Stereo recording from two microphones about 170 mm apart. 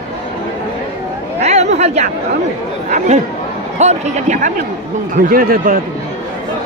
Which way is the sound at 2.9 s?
40° right (ahead or behind).